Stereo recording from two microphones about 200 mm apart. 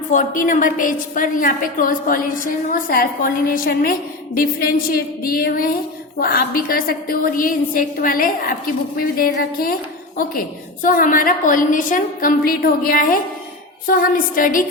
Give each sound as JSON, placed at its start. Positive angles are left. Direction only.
{"t": 0.1, "sound": "a woman's voice", "side_deg": 40}
{"t": 10.8, "sound": "a woman's voice", "side_deg": 45}